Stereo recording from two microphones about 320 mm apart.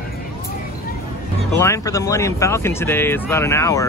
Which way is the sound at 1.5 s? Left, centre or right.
Centre.